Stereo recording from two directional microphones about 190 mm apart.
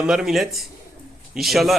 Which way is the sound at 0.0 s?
Centre (ahead or behind).